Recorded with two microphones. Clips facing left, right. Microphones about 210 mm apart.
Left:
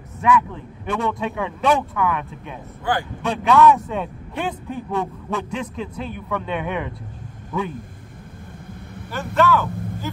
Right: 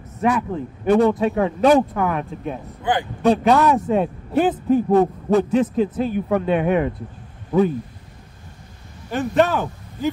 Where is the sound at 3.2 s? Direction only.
40° right (ahead or behind).